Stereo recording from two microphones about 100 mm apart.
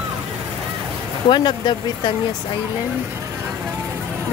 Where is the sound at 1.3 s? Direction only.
50° left (ahead or behind).